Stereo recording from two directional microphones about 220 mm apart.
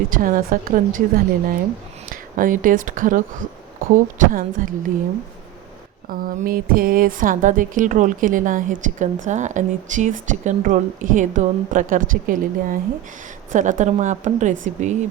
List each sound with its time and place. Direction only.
0.1 s speech: 40° right (ahead or behind)
6.1 s speech: 40° right (ahead or behind)